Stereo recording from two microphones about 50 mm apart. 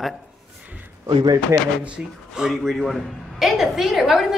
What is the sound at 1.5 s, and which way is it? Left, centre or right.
Speech, right.